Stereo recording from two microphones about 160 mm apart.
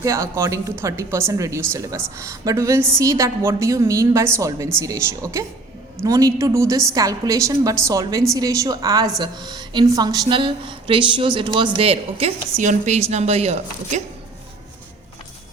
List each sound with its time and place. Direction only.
0.0 s speech: 20° right (ahead or behind); by 12.3 s 35° right (ahead or behind)
12.6 s a woman's voice: 45° right (ahead or behind)